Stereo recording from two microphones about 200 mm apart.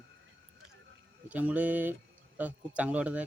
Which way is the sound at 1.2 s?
5° right (ahead or behind).